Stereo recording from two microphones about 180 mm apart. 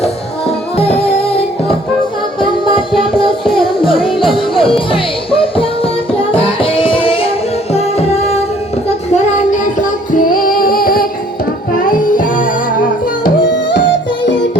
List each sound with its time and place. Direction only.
0.8 s music: 35° left (ahead or behind)
9.0 s child singing: 40° left (ahead or behind)
11.7 s music: 50° left (ahead or behind)